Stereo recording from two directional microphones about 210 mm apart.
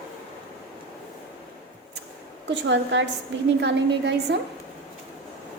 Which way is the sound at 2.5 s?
60° right (ahead or behind).